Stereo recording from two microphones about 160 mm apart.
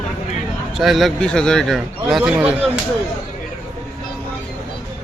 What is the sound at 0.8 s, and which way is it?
A man's voice, centre (ahead or behind).